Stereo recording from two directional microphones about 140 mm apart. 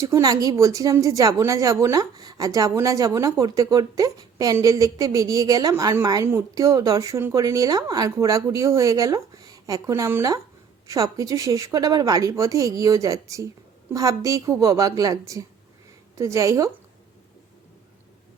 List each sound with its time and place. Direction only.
0.0 s speech: 25° right (ahead or behind)